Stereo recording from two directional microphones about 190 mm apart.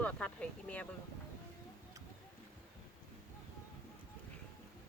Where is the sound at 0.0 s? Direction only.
5° left (ahead or behind).